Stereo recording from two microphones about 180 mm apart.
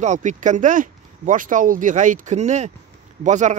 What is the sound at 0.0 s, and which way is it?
Speech, 45° right (ahead or behind).